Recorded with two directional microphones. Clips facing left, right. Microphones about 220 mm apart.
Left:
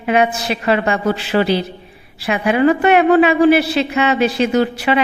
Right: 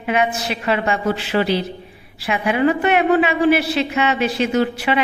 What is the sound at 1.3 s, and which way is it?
Speech, 50° left (ahead or behind).